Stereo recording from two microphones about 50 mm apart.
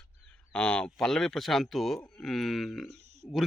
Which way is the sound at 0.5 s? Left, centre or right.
Centre.